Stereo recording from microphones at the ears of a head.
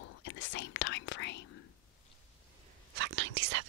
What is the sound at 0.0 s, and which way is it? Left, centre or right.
Whispering, left.